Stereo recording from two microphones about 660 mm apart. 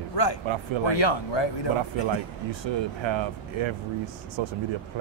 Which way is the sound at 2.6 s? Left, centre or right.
Right.